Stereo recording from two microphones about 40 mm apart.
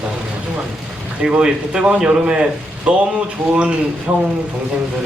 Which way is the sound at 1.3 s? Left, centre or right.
Right.